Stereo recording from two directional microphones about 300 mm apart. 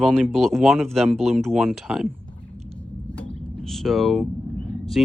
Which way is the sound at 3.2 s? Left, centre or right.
Centre.